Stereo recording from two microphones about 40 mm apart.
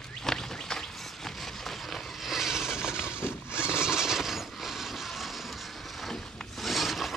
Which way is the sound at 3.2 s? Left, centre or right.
Left.